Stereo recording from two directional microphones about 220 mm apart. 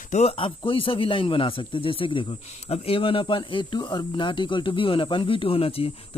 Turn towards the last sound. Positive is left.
turn(degrees=25)  # may be behind; listen again after turning